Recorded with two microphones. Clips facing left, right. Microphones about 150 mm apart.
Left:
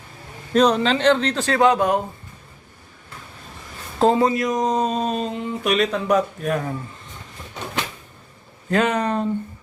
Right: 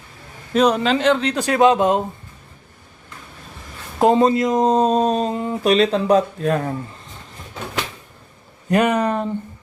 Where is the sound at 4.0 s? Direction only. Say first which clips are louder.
Right 3 dB; 20° right (ahead or behind).